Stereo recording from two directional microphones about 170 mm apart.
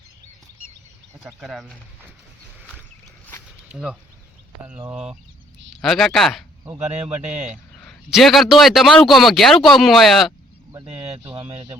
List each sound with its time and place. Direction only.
1.2 s a man's voice: centre (ahead or behind)
3.7 s a man's voice: 5° right (ahead or behind)
6.8 s speech: 40° right (ahead or behind)
7.8 s a man's voice: centre (ahead or behind)
11.3 s speech: 35° right (ahead or behind)